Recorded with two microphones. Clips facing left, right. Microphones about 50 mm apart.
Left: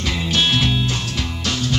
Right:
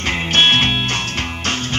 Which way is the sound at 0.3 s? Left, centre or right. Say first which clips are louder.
Right 4 dB; right.